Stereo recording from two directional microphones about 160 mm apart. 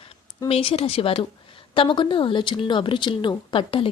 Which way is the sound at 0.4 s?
35° left (ahead or behind).